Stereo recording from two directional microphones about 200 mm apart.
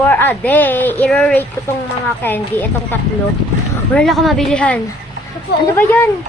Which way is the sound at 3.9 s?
Centre (ahead or behind).